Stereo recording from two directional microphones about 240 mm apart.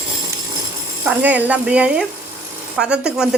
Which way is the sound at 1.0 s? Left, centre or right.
Centre.